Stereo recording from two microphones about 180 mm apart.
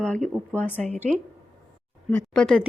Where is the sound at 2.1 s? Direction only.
5° left (ahead or behind).